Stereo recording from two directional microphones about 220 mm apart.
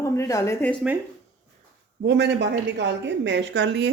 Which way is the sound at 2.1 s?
50° right (ahead or behind).